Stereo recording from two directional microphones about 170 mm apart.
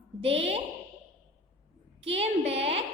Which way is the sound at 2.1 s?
35° right (ahead or behind).